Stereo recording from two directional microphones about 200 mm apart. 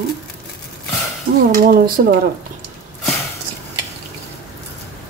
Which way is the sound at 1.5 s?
45° right (ahead or behind).